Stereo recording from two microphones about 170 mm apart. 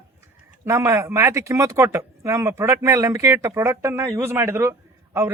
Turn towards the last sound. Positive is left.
turn(degrees=-15)  # may be behind; listen again after turning